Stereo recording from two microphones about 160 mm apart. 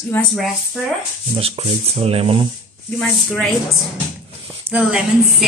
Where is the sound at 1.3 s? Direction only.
35° right (ahead or behind).